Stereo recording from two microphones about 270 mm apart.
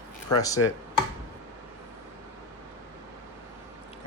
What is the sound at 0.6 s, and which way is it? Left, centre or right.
Speech, left.